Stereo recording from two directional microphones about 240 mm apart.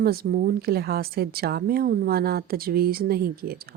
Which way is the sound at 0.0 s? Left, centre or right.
Right.